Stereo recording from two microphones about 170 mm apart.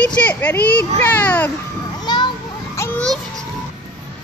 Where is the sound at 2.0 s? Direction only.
25° left (ahead or behind).